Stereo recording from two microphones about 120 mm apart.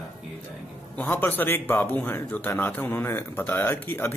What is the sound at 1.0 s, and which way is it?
Speech, 15° left (ahead or behind).